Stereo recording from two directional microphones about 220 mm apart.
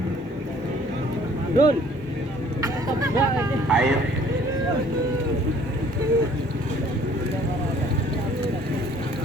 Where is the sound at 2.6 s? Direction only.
15° right (ahead or behind).